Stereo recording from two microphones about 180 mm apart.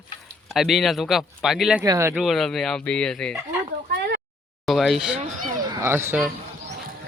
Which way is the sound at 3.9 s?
50° right (ahead or behind).